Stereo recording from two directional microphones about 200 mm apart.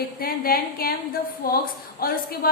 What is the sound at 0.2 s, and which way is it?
A woman's voice, 50° left (ahead or behind).